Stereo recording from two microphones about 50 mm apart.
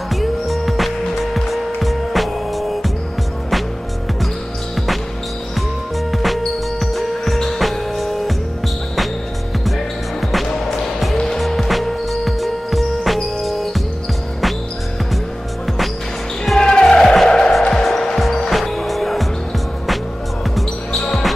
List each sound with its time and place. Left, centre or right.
0.1 s music: centre
6.1 s music: centre
10.3 s music: centre
16.5 s basketball bounce: centre
16.9 s music: centre
20.5 s basketball bounce: centre